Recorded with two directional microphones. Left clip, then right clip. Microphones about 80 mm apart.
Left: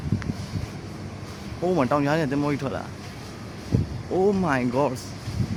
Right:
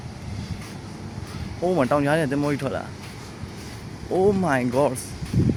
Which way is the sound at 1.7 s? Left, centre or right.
Centre.